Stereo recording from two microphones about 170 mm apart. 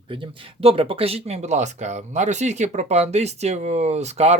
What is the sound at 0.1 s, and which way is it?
Speech, 30° right (ahead or behind).